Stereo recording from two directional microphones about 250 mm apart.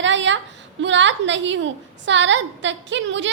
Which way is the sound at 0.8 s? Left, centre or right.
Right.